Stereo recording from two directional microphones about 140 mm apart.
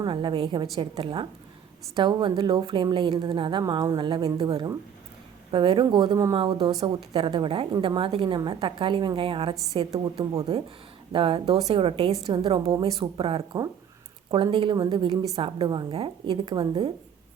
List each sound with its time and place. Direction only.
0.0 s a woman's voice: 35° right (ahead or behind)
3.6 s a woman's voice: 25° right (ahead or behind)
6.3 s a woman's voice: 40° right (ahead or behind)
11.1 s a woman's voice: 40° right (ahead or behind)
12.3 s a woman's voice: 35° right (ahead or behind)
15.1 s a woman's voice: 45° right (ahead or behind)